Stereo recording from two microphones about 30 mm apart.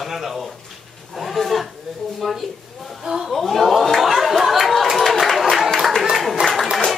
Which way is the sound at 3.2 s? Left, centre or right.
Centre.